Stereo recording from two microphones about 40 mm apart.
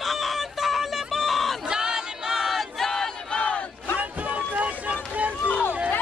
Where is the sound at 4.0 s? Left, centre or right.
Right.